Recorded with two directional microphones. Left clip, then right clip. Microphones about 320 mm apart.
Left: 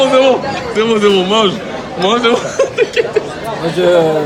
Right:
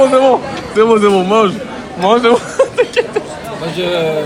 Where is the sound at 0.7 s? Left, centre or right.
Centre.